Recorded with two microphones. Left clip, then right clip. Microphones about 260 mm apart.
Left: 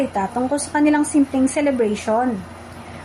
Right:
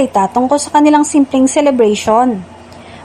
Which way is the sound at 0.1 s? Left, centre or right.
Right.